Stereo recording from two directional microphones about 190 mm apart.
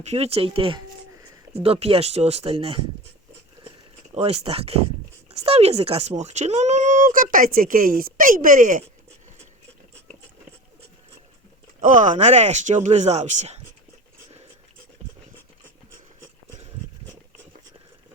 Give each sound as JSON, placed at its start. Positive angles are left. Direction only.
{"t": 0.0, "sound": "speech", "side_deg": -35}
{"t": 4.1, "sound": "speech", "side_deg": -35}
{"t": 11.8, "sound": "speech", "side_deg": -45}